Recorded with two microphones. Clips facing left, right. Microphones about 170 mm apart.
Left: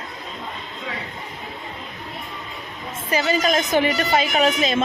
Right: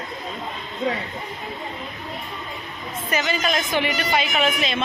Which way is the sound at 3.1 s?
35° left (ahead or behind).